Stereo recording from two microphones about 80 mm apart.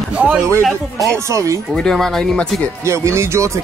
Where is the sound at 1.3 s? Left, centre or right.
Right.